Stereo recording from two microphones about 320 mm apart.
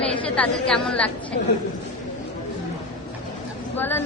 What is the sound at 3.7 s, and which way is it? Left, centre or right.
Speech, centre.